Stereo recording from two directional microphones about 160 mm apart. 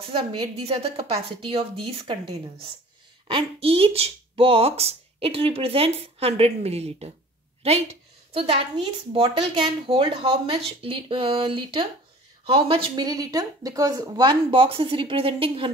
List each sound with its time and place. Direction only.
0.1 s speech: 35° right (ahead or behind)
3.3 s speech: 35° right (ahead or behind)